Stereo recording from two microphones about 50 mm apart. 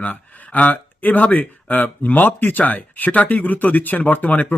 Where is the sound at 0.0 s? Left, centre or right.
Left.